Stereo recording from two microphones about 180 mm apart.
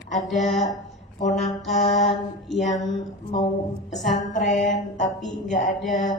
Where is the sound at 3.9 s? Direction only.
45° left (ahead or behind).